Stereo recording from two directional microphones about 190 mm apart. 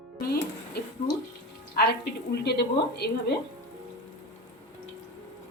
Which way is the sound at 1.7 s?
60° left (ahead or behind).